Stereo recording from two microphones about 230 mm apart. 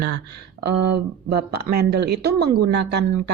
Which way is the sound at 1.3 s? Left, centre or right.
Right.